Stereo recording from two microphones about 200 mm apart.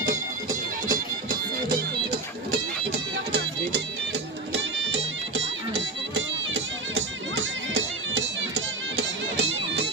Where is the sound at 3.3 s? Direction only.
60° right (ahead or behind).